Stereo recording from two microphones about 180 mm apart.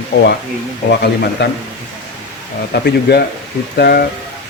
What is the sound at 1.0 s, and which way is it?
Speech, 65° left (ahead or behind).